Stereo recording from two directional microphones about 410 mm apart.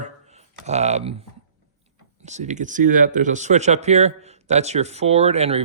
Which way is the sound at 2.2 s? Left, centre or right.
Centre.